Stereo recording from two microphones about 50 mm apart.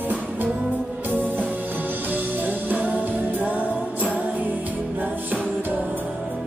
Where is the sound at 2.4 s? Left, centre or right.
Right.